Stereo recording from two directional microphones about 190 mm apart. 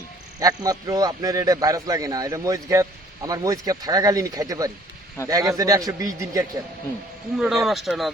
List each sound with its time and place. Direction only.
0.3 s a man's voice: 20° right (ahead or behind)
7.3 s speech: 5° right (ahead or behind)